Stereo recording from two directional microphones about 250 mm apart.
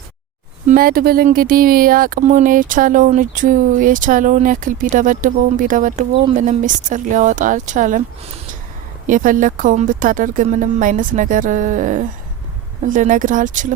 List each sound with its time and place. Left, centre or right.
0.7 s speech: right